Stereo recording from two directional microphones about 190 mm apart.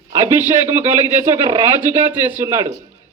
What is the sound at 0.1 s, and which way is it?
A man's voice, 15° right (ahead or behind).